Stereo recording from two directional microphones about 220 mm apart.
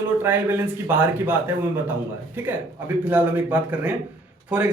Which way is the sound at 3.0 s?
10° right (ahead or behind).